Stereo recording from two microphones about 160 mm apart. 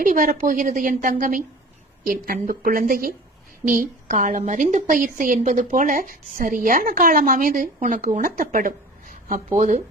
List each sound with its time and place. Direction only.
0.0 s a woman's voice: 55° right (ahead or behind)